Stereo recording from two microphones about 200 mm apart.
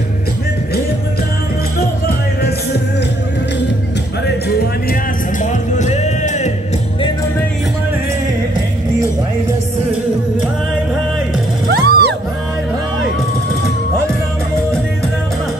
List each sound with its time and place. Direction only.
5.4 s music: 40° left (ahead or behind)
11.7 s music: 55° right (ahead or behind)